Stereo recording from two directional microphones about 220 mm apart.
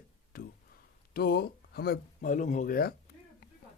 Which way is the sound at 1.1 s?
45° left (ahead or behind).